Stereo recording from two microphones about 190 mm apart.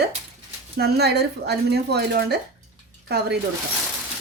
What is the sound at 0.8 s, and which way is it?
Speech, 55° right (ahead or behind).